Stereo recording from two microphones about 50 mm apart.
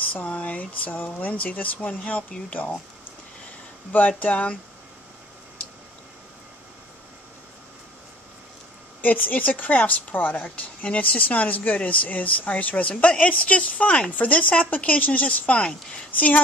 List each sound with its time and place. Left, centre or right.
0.1 s speech: left
4.2 s a woman's voice: left
9.0 s a woman's voice: left